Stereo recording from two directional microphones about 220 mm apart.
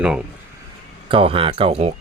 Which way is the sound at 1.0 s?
25° right (ahead or behind).